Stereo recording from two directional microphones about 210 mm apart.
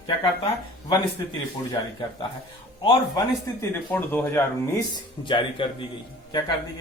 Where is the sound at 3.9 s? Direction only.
10° left (ahead or behind).